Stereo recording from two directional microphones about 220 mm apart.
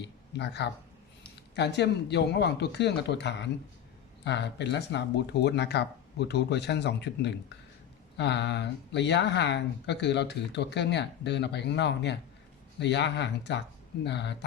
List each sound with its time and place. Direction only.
0.0 s speech: 50° left (ahead or behind)